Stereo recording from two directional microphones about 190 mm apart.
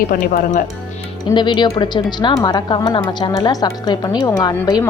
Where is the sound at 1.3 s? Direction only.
25° left (ahead or behind).